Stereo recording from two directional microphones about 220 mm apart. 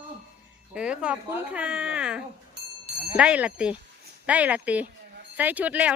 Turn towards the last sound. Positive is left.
turn(degrees=-5)  # may be behind; listen again after turning